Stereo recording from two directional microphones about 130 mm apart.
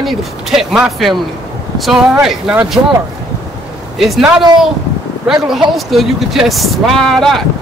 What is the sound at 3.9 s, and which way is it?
Speech, centre (ahead or behind).